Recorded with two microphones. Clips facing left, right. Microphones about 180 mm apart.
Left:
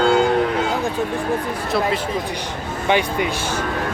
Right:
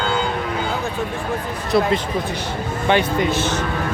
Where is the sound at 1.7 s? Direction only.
Centre (ahead or behind).